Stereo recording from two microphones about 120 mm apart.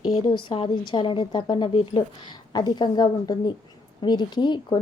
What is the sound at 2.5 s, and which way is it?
A woman's voice, 35° left (ahead or behind).